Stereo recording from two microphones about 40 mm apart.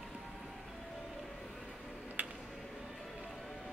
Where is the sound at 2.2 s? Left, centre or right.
Right.